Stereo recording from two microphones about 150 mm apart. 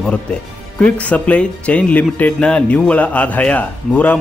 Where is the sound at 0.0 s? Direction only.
5° left (ahead or behind).